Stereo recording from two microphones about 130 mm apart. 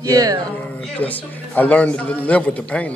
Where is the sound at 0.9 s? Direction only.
10° left (ahead or behind).